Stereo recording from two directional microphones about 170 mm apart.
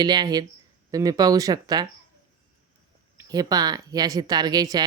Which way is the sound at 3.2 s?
20° right (ahead or behind).